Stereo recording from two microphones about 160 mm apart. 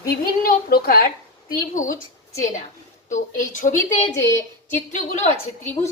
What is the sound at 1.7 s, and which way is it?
Speech, 55° left (ahead or behind).